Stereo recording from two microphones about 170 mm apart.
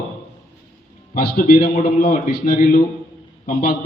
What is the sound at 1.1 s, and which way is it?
A man's voice, 55° left (ahead or behind).